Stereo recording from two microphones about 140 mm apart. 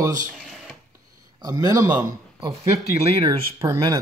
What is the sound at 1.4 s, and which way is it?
Speech, 30° right (ahead or behind).